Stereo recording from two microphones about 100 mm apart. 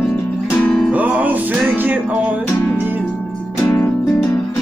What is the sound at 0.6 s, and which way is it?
Music, 5° left (ahead or behind).